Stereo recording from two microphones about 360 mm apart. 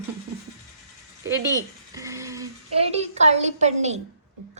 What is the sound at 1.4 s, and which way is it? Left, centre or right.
A child's voice, centre.